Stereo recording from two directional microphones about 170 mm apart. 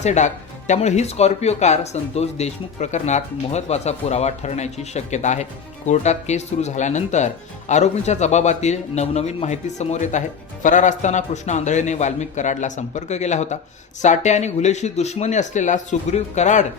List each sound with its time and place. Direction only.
0.0 s a man's voice: 45° left (ahead or behind)